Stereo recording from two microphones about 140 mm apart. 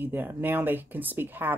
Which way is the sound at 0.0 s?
15° right (ahead or behind).